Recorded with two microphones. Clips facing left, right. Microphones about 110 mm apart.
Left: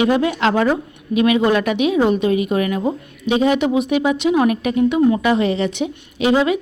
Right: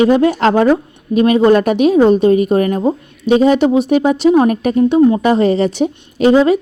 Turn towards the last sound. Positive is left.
turn(degrees=-40)  # may be behind; listen again after turning